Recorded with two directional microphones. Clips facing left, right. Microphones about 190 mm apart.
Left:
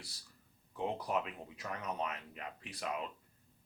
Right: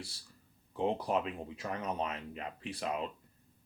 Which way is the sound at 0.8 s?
30° right (ahead or behind).